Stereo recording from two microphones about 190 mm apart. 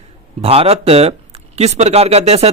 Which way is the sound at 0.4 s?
30° right (ahead or behind).